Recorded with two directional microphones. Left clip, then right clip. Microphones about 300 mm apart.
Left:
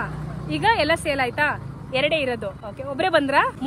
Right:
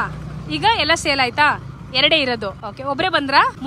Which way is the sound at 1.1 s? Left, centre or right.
Right.